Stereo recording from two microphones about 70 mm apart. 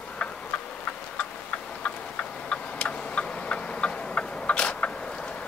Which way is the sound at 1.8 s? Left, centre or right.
Centre.